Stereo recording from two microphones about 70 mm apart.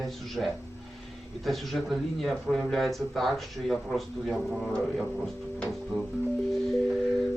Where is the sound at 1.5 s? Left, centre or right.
Centre.